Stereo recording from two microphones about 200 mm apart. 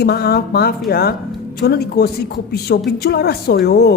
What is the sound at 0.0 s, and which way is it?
A woman's voice, 50° left (ahead or behind).